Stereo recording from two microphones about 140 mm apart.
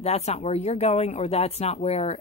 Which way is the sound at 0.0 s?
50° left (ahead or behind).